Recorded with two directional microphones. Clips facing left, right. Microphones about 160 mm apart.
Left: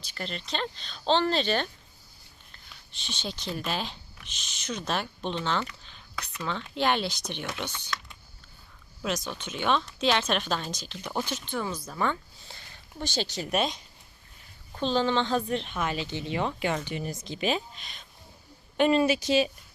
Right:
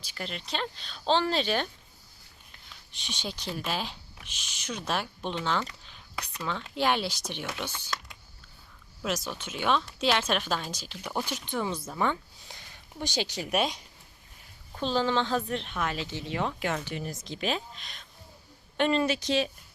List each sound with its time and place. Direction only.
0.0 s speech: 10° right (ahead or behind)
2.9 s speech: 15° right (ahead or behind)
9.0 s speech: 5° right (ahead or behind)
14.8 s speech: 5° right (ahead or behind)